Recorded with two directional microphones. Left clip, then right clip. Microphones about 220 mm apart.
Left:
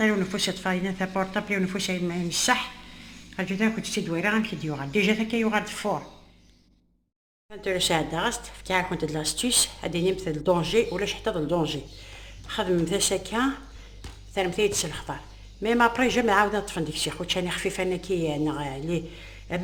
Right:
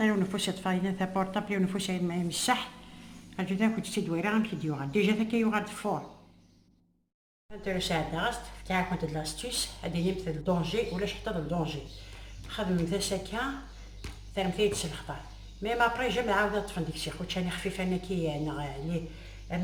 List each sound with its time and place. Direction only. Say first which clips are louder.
0.0 s speech: left 5 dB; 5° right (ahead or behind)
7.6 s speech: left 6 dB; 50° left (ahead or behind)